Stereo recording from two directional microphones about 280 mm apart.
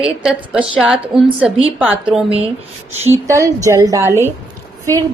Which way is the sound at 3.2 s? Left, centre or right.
Centre.